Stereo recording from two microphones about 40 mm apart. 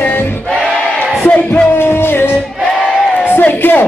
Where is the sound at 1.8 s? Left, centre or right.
Left.